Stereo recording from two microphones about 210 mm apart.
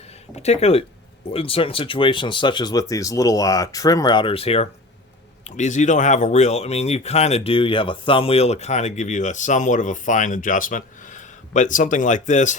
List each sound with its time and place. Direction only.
0.3 s speech: 30° left (ahead or behind)